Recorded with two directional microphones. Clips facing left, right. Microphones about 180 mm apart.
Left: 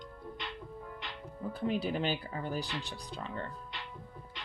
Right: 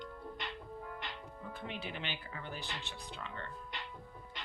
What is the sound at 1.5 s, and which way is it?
Speech, 40° left (ahead or behind).